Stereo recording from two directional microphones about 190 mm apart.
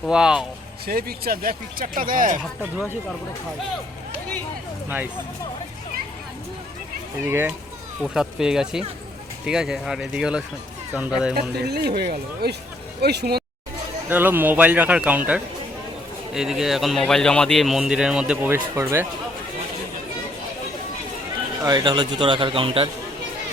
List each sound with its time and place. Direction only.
0.0 s a man's voice: 5° right (ahead or behind)
0.9 s speech: 50° right (ahead or behind)
7.3 s a man's voice: 10° right (ahead or behind)
11.3 s speech: 60° right (ahead or behind)
14.1 s speech: 10° right (ahead or behind)
16.3 s a man's voice: 5° right (ahead or behind)
21.6 s a man's voice: 20° right (ahead or behind)